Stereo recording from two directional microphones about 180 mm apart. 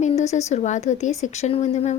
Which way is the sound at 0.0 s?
40° left (ahead or behind).